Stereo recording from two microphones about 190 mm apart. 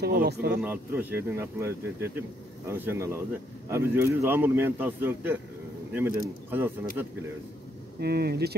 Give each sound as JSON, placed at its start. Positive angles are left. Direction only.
{"t": 0.0, "sound": "speech", "side_deg": -55}
{"t": 0.6, "sound": "speech", "side_deg": -10}
{"t": 8.0, "sound": "speech", "side_deg": -55}